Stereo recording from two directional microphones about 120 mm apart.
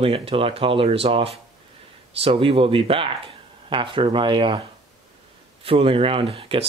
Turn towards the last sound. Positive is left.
turn(degrees=-50)  # may be behind; listen again after turning